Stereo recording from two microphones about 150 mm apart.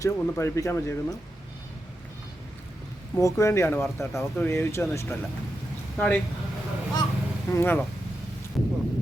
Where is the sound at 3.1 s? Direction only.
20° left (ahead or behind).